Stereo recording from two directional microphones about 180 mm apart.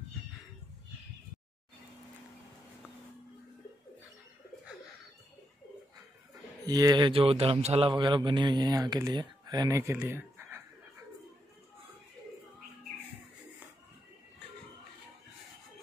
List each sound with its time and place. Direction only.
6.6 s a man's voice: 20° right (ahead or behind)